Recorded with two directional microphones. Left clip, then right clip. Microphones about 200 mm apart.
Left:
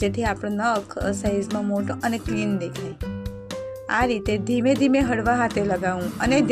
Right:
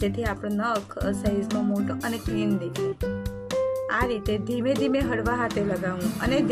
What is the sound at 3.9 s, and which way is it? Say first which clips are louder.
Speech: left 3 dB; 35° left (ahead or behind).